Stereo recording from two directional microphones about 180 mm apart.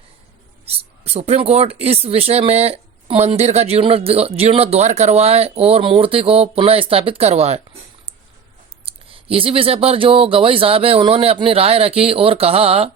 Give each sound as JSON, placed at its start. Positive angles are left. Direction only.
{"t": 0.7, "sound": "speech", "side_deg": -35}